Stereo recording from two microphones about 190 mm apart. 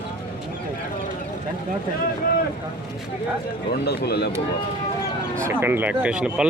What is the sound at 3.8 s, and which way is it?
Speech, 60° left (ahead or behind).